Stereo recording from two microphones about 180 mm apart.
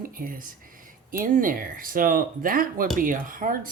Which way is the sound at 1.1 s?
50° right (ahead or behind).